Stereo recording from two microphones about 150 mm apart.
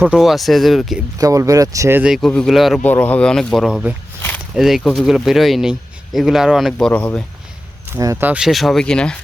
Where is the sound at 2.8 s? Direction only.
10° left (ahead or behind).